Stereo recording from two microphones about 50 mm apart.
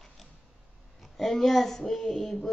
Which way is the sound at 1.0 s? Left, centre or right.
Centre.